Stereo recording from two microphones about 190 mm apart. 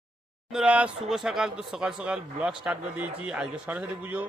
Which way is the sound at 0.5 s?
5° right (ahead or behind).